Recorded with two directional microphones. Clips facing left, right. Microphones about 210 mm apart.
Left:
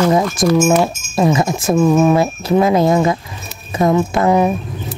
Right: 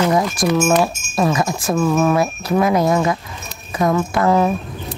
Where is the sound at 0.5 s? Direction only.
15° left (ahead or behind).